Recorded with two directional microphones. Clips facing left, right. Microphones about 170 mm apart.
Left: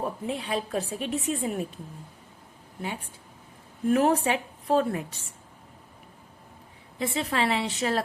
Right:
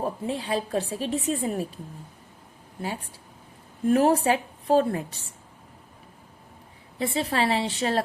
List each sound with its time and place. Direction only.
0.0 s a woman's voice: 35° right (ahead or behind)
3.8 s a woman's voice: 35° right (ahead or behind)
7.0 s a woman's voice: 35° right (ahead or behind)